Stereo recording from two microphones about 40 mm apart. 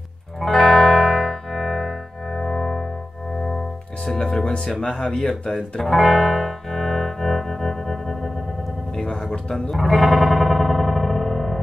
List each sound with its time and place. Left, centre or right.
0.4 s music: centre
4.6 s speech: centre
5.4 s music: centre
9.3 s speech: left
9.7 s music: centre